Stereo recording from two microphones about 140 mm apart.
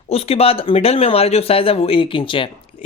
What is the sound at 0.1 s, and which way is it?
Speech, 45° left (ahead or behind).